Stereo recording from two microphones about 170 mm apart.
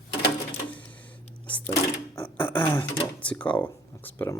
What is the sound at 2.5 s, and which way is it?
Speech, 10° left (ahead or behind).